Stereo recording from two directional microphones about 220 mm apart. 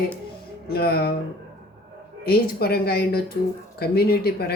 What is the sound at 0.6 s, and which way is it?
Speech, 45° left (ahead or behind).